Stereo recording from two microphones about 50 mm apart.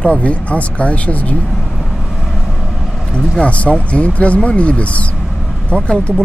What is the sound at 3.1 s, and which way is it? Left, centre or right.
Speech, left.